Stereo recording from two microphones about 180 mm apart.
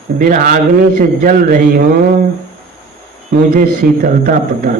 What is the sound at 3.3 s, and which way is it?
A man's voice, 50° right (ahead or behind).